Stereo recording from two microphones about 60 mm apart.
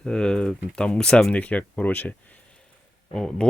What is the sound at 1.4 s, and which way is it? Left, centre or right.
Speech, left.